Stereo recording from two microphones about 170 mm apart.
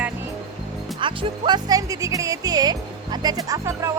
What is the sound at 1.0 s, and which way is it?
Speech, 25° right (ahead or behind).